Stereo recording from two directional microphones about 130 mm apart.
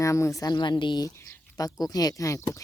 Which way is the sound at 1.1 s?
25° left (ahead or behind).